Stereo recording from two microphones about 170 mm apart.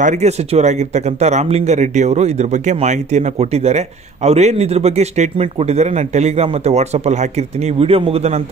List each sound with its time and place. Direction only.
0.0 s speech: 45° right (ahead or behind)